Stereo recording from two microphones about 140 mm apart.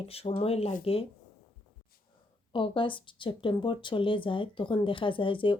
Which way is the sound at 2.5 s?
35° left (ahead or behind).